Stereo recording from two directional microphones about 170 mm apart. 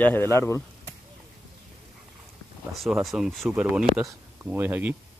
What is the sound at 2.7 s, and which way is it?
Speech, centre (ahead or behind).